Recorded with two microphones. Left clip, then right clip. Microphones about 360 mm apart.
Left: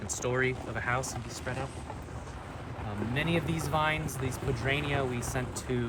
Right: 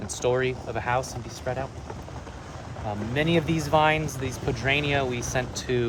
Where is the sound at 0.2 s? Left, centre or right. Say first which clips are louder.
Right 6 dB; centre.